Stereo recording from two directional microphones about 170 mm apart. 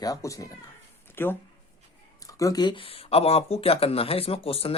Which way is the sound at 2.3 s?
20° left (ahead or behind).